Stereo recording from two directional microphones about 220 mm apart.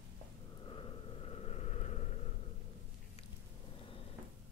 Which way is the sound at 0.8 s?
30° left (ahead or behind).